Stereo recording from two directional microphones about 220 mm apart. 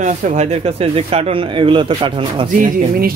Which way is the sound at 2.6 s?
40° right (ahead or behind).